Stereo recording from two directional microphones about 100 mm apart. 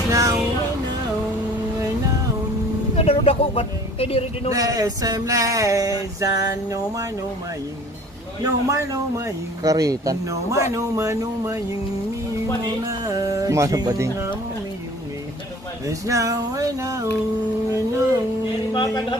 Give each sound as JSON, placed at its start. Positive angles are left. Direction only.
{"t": 0.1, "sound": "music", "side_deg": -35}
{"t": 3.0, "sound": "speech", "side_deg": 75}
{"t": 4.5, "sound": "speech", "side_deg": -35}
{"t": 8.4, "sound": "speech", "side_deg": -35}
{"t": 12.8, "sound": "speech", "side_deg": -35}
{"t": 15.9, "sound": "speech", "side_deg": -35}
{"t": 18.7, "sound": "speech", "side_deg": 50}